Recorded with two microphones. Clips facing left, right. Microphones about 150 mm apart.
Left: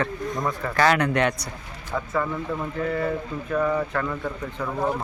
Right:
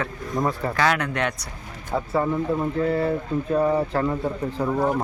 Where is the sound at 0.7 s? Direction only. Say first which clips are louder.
Left 6 dB; centre (ahead or behind).